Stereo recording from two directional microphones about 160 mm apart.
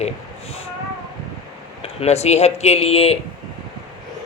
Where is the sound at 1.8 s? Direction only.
40° left (ahead or behind).